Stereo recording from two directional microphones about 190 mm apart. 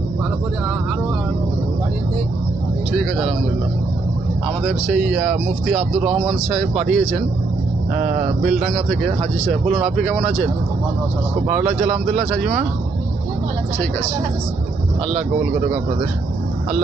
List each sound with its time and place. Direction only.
2.9 s speech: centre (ahead or behind)
4.7 s speech: 5° right (ahead or behind)
7.9 s speech: 45° right (ahead or behind)
8.4 s speech: 5° right (ahead or behind)